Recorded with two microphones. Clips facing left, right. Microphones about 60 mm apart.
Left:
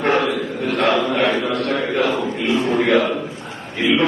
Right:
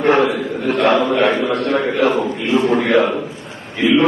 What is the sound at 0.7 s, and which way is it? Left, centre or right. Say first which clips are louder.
Mantra: right 3 dB; right.